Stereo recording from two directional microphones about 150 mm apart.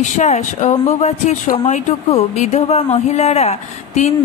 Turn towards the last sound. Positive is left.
turn(degrees=45)  # may be behind; listen again after turning